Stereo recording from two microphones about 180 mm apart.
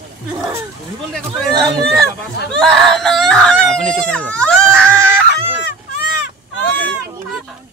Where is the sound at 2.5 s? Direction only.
Centre (ahead or behind).